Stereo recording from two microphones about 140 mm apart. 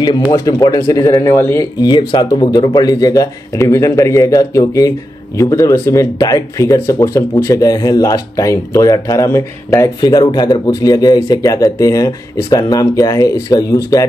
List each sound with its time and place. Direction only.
0.3 s speech: 25° left (ahead or behind)
1.8 s speech: 30° left (ahead or behind)